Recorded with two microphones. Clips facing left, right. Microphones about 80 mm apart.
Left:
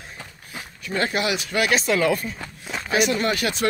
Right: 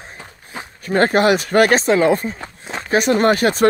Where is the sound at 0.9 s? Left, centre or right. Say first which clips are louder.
Right 10 dB; right.